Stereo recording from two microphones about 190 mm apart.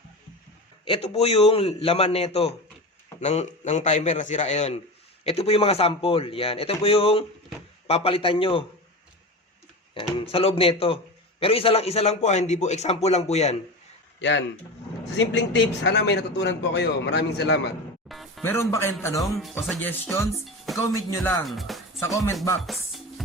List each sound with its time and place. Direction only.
0.9 s a man's voice: 30° left (ahead or behind)
9.9 s a man's voice: 25° left (ahead or behind)
14.2 s speech: 70° left (ahead or behind)
18.1 s music: centre (ahead or behind)
18.4 s speech: 15° left (ahead or behind)
19.6 s speech: 5° left (ahead or behind)
21.4 s speech: centre (ahead or behind)
22.0 s speech: 15° left (ahead or behind)
22.6 s chopping: centre (ahead or behind)